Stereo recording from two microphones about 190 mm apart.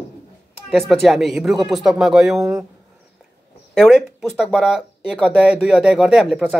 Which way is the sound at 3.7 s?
Centre (ahead or behind).